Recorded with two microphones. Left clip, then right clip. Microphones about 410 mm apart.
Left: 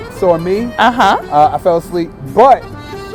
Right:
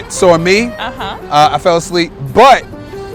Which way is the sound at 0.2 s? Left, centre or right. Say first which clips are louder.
Right 4 dB; right.